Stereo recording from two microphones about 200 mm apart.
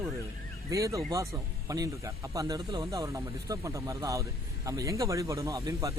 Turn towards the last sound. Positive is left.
turn(degrees=-15)  # may be behind; listen again after turning